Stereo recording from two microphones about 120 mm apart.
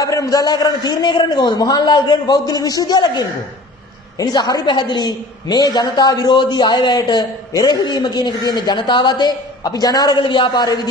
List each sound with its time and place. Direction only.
0.0 s a woman's voice: 30° left (ahead or behind)